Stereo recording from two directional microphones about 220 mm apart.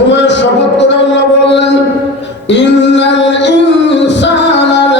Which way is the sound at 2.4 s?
55° left (ahead or behind).